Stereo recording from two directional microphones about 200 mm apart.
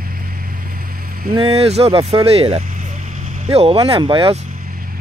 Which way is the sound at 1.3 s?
30° right (ahead or behind).